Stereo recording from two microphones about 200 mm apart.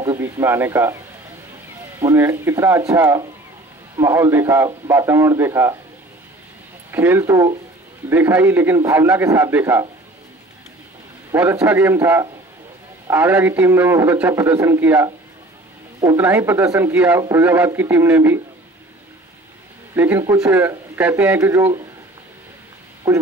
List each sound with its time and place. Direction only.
0.0 s speech: 15° right (ahead or behind)
2.0 s a man's voice: 15° right (ahead or behind)
6.9 s a man's voice: 10° right (ahead or behind)
11.3 s a man's voice: 10° right (ahead or behind)
20.0 s a man's voice: 10° right (ahead or behind)
23.0 s speech: 15° right (ahead or behind)